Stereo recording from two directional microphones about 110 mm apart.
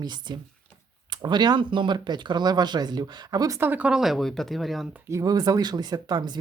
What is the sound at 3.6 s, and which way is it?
Speech, 15° right (ahead or behind).